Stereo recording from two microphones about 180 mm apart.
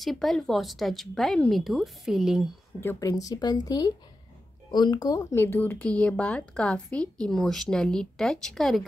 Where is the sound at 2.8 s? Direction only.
20° left (ahead or behind).